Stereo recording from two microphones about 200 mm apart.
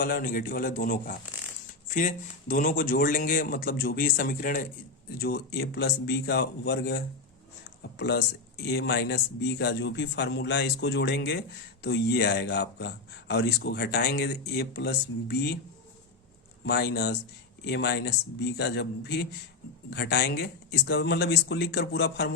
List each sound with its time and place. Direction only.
0.0 s a man's voice: 45° left (ahead or behind)
16.6 s a man's voice: 55° left (ahead or behind)